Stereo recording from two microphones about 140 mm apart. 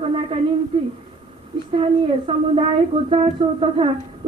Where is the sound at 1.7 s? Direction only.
40° right (ahead or behind).